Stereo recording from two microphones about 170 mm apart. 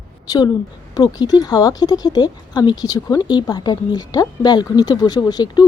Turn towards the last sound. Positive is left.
turn(degrees=25)  # may be behind; listen again after turning